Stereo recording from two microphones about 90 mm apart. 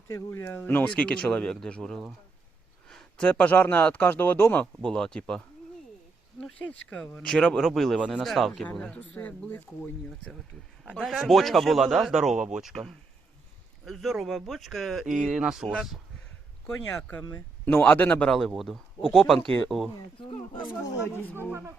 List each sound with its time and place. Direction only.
0.1 s speech: 30° left (ahead or behind)
0.9 s a man's voice: 10° left (ahead or behind)
4.6 s speech: 10° left (ahead or behind)
6.4 s a man's voice: 15° left (ahead or behind)
8.6 s speech: 15° left (ahead or behind)
11.0 s a man's voice: centre (ahead or behind)
13.8 s a man's voice: centre (ahead or behind)
17.3 s a man's voice: 25° left (ahead or behind)